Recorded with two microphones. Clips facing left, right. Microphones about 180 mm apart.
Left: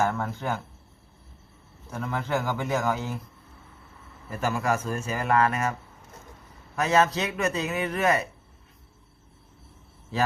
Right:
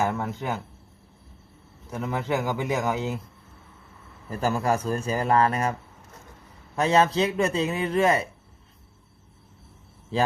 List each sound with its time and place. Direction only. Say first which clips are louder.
0.0 s speech: even; 20° right (ahead or behind)
1.9 s a man's voice: right 1 dB; 20° right (ahead or behind)
4.3 s a man's voice: right 2 dB; 35° right (ahead or behind)
6.7 s a man's voice: right 2 dB; 30° right (ahead or behind)